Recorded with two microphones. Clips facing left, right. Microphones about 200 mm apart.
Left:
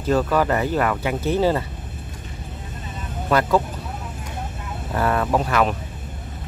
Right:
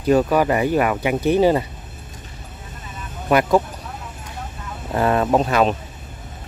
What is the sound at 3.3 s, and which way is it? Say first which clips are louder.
Speech: right 3 dB; 15° right (ahead or behind).